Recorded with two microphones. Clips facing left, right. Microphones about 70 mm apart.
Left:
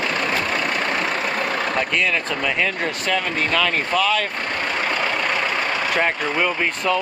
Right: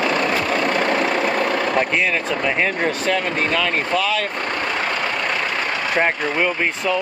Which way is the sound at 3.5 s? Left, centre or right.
Centre.